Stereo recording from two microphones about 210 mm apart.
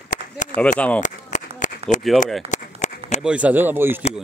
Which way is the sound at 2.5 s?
35° left (ahead or behind).